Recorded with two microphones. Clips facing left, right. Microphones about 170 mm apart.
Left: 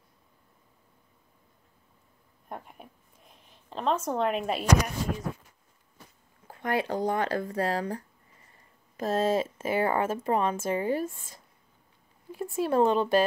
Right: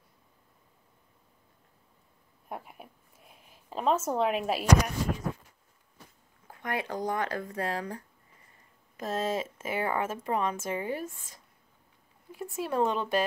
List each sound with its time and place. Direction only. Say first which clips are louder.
2.5 s speech: even; 5° right (ahead or behind)
6.4 s speech: left 5 dB; 30° left (ahead or behind)